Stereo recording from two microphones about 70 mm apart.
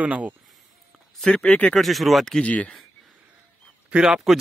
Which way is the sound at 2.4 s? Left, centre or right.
Centre.